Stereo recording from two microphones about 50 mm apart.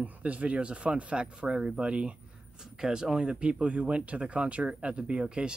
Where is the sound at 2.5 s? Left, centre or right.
Centre.